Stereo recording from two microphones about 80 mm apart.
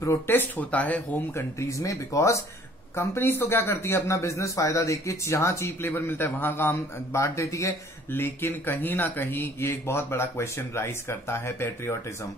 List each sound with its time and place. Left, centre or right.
0.0 s speech: left
1.3 s a man's voice: left
3.0 s a man's voice: left
8.1 s speech: left